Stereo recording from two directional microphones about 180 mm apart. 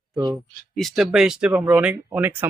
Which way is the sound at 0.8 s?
Centre (ahead or behind).